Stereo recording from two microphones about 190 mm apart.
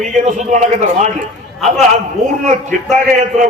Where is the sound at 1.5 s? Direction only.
Centre (ahead or behind).